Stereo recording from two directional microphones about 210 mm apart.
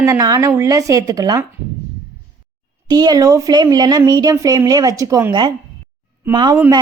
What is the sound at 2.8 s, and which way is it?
A woman's voice, 20° right (ahead or behind).